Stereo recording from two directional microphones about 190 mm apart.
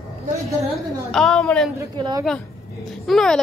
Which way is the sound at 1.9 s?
25° right (ahead or behind).